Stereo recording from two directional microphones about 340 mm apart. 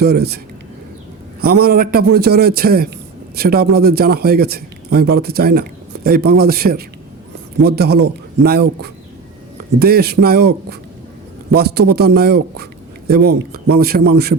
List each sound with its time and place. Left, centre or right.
0.0 s a man's voice: right
1.4 s a man's voice: right